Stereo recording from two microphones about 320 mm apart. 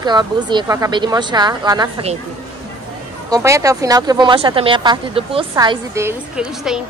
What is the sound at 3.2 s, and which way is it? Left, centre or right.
Speech, centre.